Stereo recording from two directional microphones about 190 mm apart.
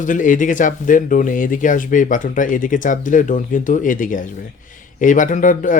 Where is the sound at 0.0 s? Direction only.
45° left (ahead or behind).